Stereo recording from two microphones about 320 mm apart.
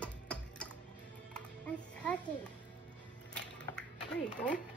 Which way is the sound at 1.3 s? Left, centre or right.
Centre.